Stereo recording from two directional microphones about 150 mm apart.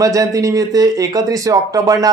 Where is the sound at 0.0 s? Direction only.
20° right (ahead or behind).